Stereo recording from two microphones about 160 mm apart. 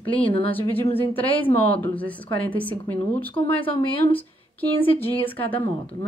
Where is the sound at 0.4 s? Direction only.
10° left (ahead or behind).